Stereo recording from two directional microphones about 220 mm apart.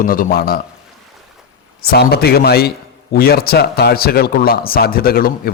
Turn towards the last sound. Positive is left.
turn(degrees=40)  # may be behind; listen again after turning